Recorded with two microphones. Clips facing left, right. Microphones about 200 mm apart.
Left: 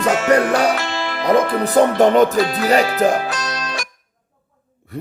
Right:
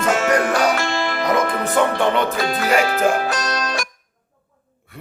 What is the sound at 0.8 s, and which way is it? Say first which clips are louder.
Music: right 2 dB; 50° right (ahead or behind).